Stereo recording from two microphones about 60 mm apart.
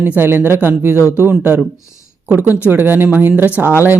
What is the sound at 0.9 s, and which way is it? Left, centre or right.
Speech, left.